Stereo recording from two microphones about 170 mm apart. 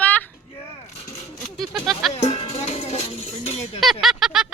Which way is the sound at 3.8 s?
Centre (ahead or behind).